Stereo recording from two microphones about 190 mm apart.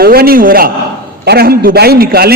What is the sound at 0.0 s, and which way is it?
A man's voice, 55° right (ahead or behind).